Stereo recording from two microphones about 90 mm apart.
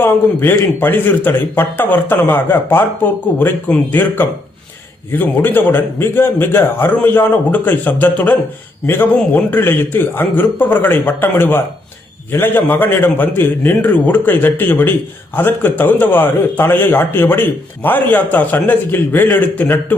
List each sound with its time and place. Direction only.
0.0 s a man's voice: 25° left (ahead or behind)